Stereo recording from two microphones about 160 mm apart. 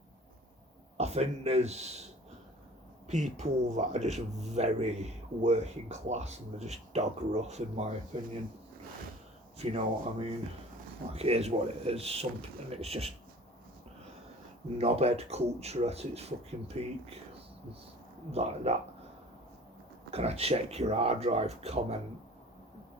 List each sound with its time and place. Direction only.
0.9 s speech: 45° right (ahead or behind)
3.1 s speech: 45° right (ahead or behind)
9.6 s speech: 35° right (ahead or behind)
14.8 s speech: 40° right (ahead or behind)
18.3 s speech: 40° right (ahead or behind)
20.1 s speech: 40° right (ahead or behind)